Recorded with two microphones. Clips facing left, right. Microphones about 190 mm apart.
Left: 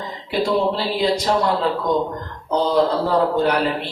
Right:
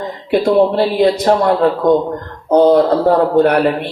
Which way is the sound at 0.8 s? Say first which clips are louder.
Right 8 dB; 55° right (ahead or behind).